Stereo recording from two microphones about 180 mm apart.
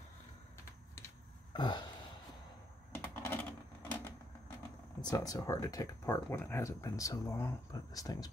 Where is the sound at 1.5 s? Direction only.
25° left (ahead or behind).